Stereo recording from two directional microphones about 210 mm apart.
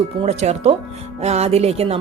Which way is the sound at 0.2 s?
30° right (ahead or behind).